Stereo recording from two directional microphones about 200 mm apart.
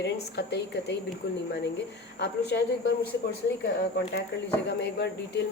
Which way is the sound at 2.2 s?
55° left (ahead or behind).